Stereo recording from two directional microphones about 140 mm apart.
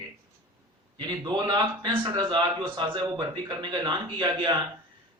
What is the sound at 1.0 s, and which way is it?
A man's voice, 30° right (ahead or behind).